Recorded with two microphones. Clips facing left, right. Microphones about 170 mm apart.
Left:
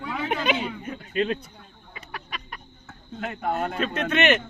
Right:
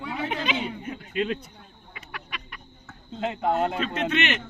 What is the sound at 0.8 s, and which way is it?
Speech, 40° left (ahead or behind).